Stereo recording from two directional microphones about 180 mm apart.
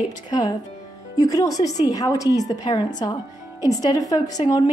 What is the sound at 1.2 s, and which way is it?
A woman's voice, 20° left (ahead or behind).